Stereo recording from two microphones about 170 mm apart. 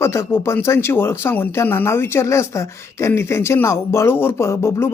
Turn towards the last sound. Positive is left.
turn(degrees=15)  # may be behind; listen again after turning